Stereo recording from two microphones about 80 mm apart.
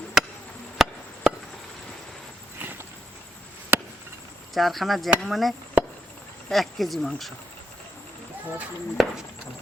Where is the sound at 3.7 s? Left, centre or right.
Right.